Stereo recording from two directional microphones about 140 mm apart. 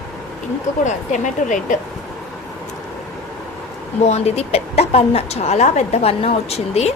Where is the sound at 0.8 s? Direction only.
60° left (ahead or behind).